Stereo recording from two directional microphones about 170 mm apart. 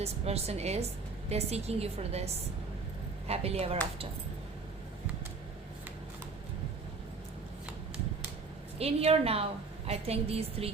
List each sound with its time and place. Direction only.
0.0 s a woman's voice: 40° right (ahead or behind)
8.8 s a woman's voice: 35° right (ahead or behind)